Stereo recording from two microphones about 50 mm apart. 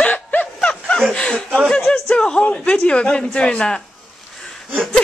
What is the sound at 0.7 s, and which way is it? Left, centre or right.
Snicker, centre.